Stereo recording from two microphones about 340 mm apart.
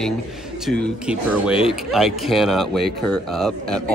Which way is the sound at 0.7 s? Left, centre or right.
Centre.